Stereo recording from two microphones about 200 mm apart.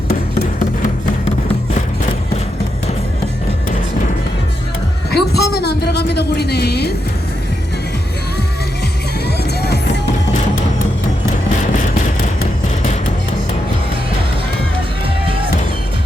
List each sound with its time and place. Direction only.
0.1 s a sound: 50° left (ahead or behind)
5.1 s a woman's voice: 55° left (ahead or behind)
9.2 s music: 55° left (ahead or behind)